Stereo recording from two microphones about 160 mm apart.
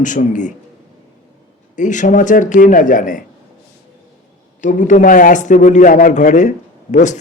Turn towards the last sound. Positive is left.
turn(degrees=50)  # may be behind; listen again after turning